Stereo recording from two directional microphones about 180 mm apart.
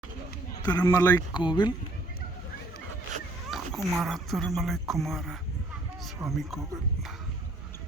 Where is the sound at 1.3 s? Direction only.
25° left (ahead or behind).